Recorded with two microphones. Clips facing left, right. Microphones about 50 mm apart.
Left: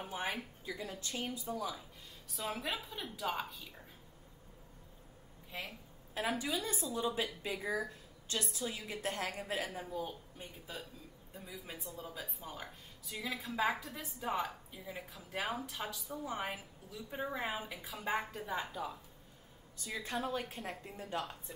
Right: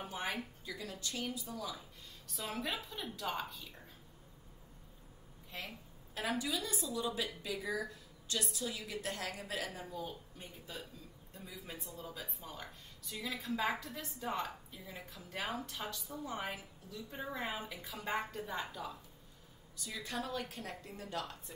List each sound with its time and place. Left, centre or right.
0.0 s speech: centre
0.7 s a woman's voice: left
1.5 s a woman's voice: centre
2.2 s a woman's voice: centre
5.5 s a woman's voice: centre
6.3 s a woman's voice: left
9.7 s a woman's voice: centre
10.4 s a woman's voice: centre
18.7 s a woman's voice: centre
19.8 s a woman's voice: left